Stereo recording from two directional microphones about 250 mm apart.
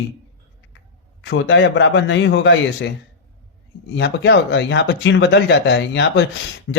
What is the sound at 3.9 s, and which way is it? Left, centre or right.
Speech, left.